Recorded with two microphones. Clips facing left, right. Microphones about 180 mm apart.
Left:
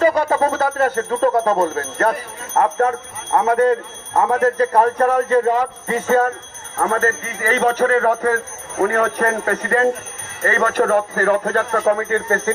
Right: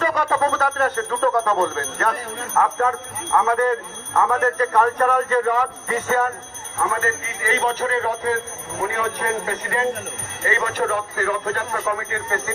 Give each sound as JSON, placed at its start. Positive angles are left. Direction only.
{"t": 0.0, "sound": "speech", "side_deg": 30}
{"t": 6.7, "sound": "speech", "side_deg": 45}